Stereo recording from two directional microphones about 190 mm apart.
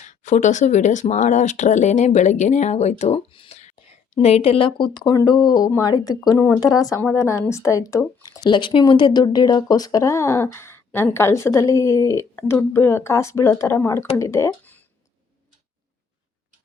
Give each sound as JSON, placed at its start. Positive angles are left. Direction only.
{"t": 0.0, "sound": "speech", "side_deg": 40}